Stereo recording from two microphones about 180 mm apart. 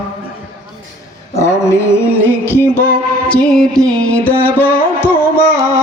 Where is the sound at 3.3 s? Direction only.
5° left (ahead or behind).